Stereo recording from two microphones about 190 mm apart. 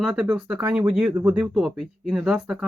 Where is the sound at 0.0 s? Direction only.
5° right (ahead or behind).